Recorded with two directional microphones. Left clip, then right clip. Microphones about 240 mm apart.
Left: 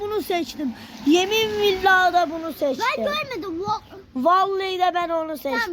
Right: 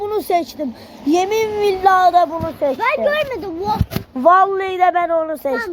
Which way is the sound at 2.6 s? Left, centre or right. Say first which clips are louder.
Right 6 dB; left.